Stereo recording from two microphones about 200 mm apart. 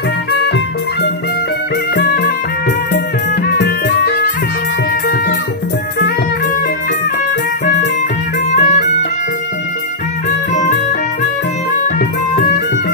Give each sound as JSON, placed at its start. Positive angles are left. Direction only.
{"t": 2.0, "sound": "music", "side_deg": 55}
{"t": 3.4, "sound": "music", "side_deg": 55}
{"t": 8.5, "sound": "music", "side_deg": 35}
{"t": 10.5, "sound": "music", "side_deg": 35}